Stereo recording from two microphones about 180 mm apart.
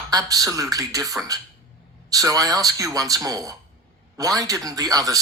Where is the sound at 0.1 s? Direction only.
20° right (ahead or behind).